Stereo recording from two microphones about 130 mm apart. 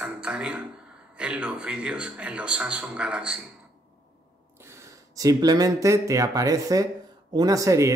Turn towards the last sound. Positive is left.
turn(degrees=-25)  # may be behind; listen again after turning